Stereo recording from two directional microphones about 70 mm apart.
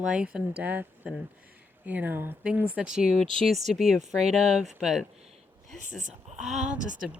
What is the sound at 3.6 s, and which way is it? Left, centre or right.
Speech, centre.